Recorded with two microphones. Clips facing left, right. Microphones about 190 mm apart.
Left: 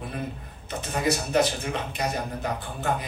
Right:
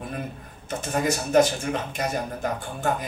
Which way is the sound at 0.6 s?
45° right (ahead or behind).